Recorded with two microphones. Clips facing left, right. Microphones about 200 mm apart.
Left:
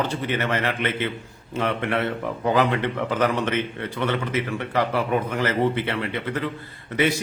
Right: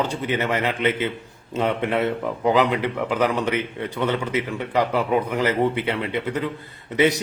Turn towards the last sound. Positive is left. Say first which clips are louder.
# right 3 dB
turn(degrees=-15)  # may be behind; listen again after turning